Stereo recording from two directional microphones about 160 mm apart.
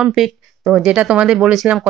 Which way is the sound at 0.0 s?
Centre (ahead or behind).